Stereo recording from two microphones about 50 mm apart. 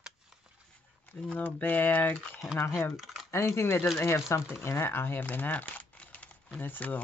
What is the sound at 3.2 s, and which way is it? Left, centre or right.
Speech, left.